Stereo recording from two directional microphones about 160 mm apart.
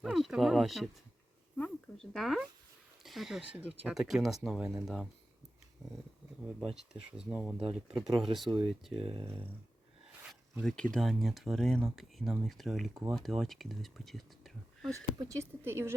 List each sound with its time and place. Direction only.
0.0 s speech: centre (ahead or behind)
1.5 s a sound: 5° left (ahead or behind)
3.0 s speech: centre (ahead or behind)
9.0 s speech: 35° right (ahead or behind)
10.6 s speech: centre (ahead or behind)
15.2 s speech: 20° right (ahead or behind)